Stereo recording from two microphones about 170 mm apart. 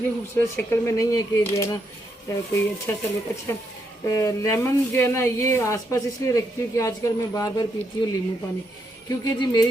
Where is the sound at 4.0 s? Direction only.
20° left (ahead or behind).